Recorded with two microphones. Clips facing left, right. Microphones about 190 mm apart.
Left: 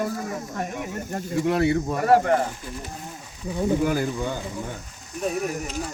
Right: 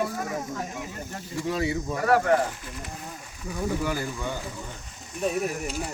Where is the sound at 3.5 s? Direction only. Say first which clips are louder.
Left 6 dB; 25° left (ahead or behind).